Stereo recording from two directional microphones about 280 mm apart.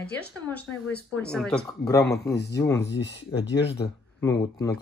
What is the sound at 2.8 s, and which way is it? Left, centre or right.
Speech, left.